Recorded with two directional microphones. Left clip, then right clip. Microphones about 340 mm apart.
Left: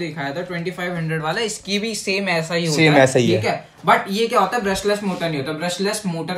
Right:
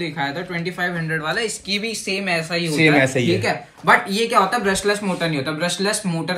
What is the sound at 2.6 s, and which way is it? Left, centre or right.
Speech, centre.